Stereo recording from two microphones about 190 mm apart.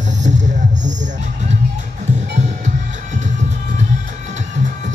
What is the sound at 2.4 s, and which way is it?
Music, 40° right (ahead or behind).